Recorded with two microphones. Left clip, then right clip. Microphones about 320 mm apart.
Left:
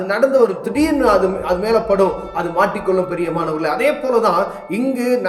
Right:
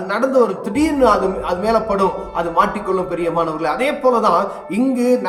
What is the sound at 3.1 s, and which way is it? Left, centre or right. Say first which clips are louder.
A man's voice: right 1 dB; centre.